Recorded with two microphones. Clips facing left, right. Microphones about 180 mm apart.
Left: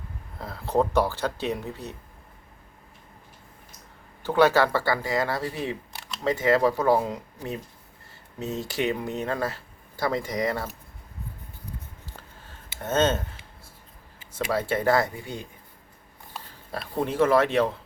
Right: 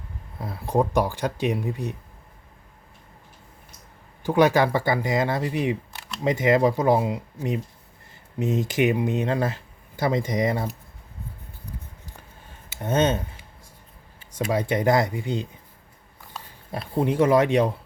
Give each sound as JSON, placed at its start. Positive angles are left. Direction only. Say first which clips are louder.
{"t": 0.3, "sound": "speech", "louder": "right 1 dB", "side_deg": -15}
{"t": 4.2, "sound": "speech", "louder": "right 1 dB", "side_deg": -15}
{"t": 12.0, "sound": "a sound", "louder": "even", "side_deg": -15}
{"t": 14.3, "sound": "speech", "louder": "right 2 dB", "side_deg": -15}
{"t": 16.7, "sound": "speech", "louder": "right 3 dB", "side_deg": -15}